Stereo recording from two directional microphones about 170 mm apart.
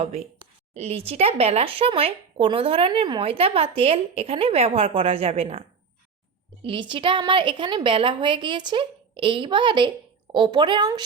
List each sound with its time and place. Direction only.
0.0 s a woman's voice: 35° right (ahead or behind)